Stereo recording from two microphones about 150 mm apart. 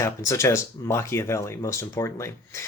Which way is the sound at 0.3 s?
20° left (ahead or behind).